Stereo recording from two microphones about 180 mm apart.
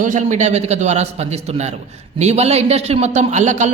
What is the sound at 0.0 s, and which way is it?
A woman's voice, 45° right (ahead or behind).